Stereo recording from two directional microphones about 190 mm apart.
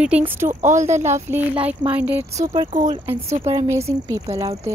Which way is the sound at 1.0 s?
15° right (ahead or behind).